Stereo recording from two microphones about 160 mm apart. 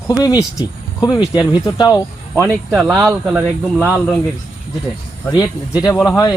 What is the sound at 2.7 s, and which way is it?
Speech, 5° right (ahead or behind).